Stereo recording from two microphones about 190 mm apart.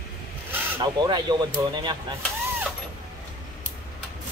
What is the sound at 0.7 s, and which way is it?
Speech, 20° right (ahead or behind).